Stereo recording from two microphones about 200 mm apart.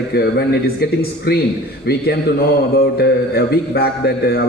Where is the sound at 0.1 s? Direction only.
55° left (ahead or behind).